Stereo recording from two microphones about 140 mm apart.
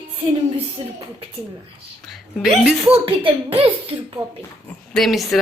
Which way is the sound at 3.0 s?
40° right (ahead or behind).